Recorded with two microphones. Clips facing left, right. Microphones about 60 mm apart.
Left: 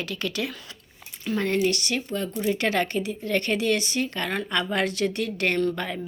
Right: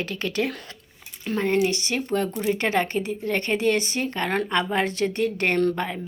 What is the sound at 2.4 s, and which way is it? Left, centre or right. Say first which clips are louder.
Speech: left 3 dB; right.